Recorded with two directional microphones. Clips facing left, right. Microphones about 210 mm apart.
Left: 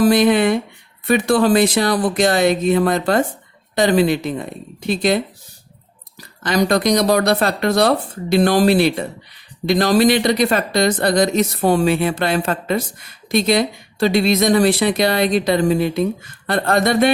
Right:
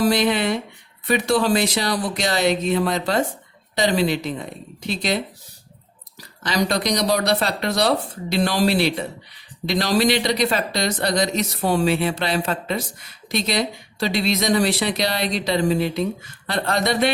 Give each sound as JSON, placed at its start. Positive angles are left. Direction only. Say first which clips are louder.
{"t": 0.0, "sound": "speech", "louder": "left 6 dB", "side_deg": 50}